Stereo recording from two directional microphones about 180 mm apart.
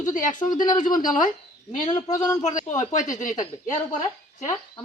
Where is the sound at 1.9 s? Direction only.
20° left (ahead or behind).